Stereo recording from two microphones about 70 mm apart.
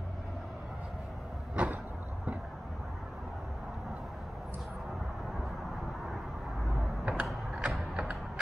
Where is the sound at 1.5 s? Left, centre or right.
Centre.